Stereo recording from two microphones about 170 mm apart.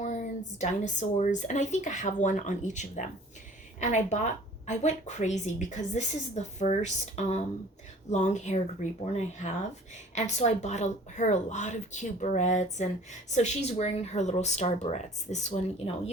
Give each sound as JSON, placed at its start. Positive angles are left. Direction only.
{"t": 0.0, "sound": "speech", "side_deg": 45}